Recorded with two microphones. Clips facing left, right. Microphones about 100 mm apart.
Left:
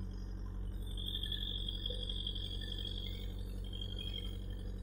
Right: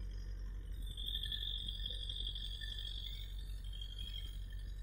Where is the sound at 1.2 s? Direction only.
45° left (ahead or behind).